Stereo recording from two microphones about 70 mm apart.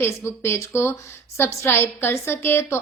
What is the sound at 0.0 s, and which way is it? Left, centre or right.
A woman's voice, left.